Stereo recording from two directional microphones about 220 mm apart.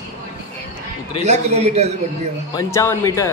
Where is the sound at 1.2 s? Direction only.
30° right (ahead or behind).